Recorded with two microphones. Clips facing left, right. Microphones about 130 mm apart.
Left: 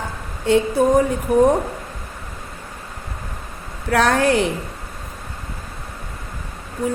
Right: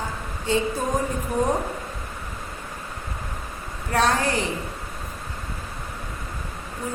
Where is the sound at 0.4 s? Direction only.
65° left (ahead or behind).